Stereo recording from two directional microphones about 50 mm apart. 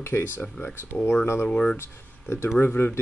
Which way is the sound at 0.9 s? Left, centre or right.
Left.